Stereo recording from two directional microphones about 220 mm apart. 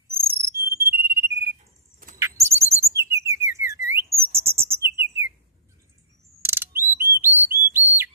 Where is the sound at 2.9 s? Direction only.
10° right (ahead or behind).